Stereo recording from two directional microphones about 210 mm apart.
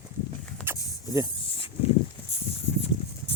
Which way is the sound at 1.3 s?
25° left (ahead or behind).